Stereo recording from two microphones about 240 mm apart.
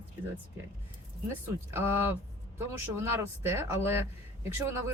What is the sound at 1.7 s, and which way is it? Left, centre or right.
Speech, centre.